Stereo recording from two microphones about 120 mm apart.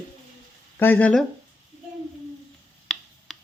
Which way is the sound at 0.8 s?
15° left (ahead or behind).